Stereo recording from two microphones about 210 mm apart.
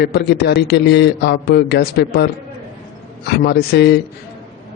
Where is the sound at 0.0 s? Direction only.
50° left (ahead or behind).